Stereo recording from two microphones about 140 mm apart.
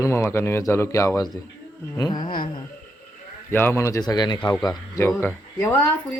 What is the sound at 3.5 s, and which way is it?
Speech, 15° left (ahead or behind).